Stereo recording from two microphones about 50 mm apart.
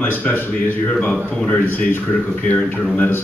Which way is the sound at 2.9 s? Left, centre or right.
Left.